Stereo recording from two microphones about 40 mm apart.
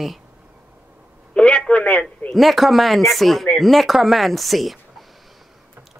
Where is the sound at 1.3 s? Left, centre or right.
Left.